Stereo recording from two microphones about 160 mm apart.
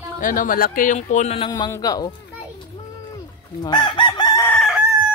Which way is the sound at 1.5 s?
25° left (ahead or behind).